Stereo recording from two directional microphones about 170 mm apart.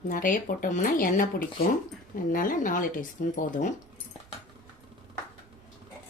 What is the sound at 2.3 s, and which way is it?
Speech, 55° left (ahead or behind).